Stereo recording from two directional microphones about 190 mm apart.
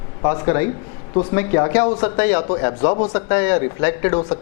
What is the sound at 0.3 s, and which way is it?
Speech, 15° left (ahead or behind).